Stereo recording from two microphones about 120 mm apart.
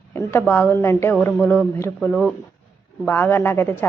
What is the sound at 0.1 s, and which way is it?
A woman's voice, 20° left (ahead or behind).